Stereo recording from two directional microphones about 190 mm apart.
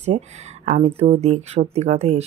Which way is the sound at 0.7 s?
35° right (ahead or behind).